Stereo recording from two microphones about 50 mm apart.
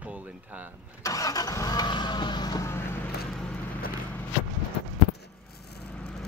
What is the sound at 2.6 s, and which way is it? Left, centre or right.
Vehicle, left.